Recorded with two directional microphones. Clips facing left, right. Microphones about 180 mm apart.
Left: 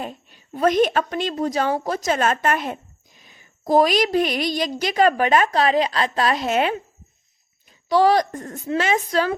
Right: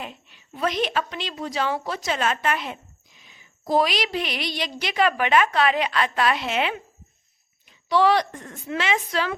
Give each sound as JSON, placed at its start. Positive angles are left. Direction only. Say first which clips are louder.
{"t": 0.0, "sound": "a woman's voice", "louder": "left 5 dB", "side_deg": 40}